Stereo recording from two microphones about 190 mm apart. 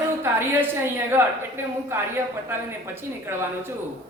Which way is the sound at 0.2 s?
15° right (ahead or behind).